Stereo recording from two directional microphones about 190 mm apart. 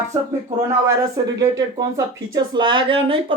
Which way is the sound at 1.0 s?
20° right (ahead or behind).